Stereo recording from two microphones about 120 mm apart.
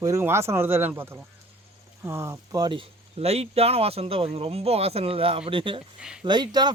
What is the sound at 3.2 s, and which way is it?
Speech, 60° right (ahead or behind).